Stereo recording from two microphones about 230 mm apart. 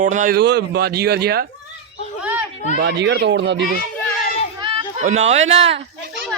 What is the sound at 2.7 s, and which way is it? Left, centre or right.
Speech, right.